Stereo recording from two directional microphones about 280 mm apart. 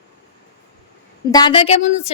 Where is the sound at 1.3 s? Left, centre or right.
Centre.